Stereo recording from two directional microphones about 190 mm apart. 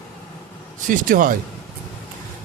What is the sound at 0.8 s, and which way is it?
Speech, 45° right (ahead or behind).